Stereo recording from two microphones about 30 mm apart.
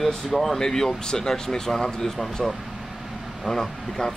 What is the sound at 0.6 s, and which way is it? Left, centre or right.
A man's voice, centre.